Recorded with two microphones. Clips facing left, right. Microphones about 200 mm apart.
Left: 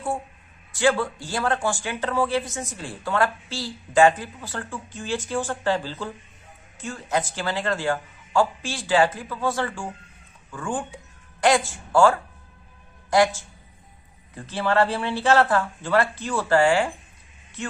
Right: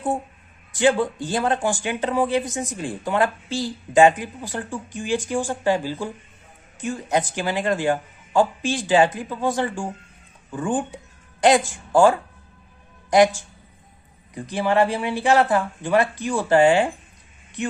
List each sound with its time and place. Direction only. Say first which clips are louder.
0.7 s speech: right 3 dB; 20° right (ahead or behind)